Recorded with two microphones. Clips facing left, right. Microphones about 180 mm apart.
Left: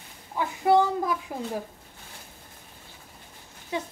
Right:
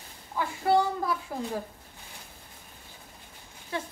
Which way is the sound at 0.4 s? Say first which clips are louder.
Left 3 dB; 20° left (ahead or behind).